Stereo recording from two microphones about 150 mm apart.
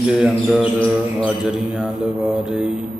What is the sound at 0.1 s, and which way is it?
Speech, 5° right (ahead or behind).